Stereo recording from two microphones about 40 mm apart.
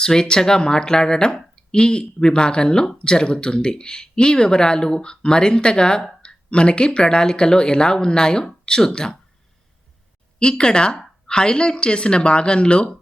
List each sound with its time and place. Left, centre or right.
0.0 s speech: centre
10.4 s speech: left